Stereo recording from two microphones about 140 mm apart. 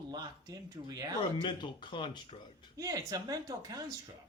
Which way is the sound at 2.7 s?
25° right (ahead or behind).